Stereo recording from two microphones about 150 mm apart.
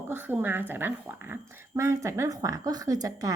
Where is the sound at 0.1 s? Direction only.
15° right (ahead or behind).